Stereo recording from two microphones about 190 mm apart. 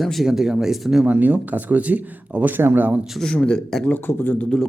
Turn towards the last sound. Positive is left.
turn(degrees=5)  # may be behind; listen again after turning